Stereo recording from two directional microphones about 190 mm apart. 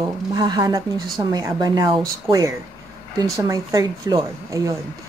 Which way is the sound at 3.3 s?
15° right (ahead or behind).